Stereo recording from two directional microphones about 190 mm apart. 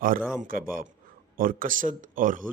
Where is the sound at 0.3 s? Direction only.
45° right (ahead or behind).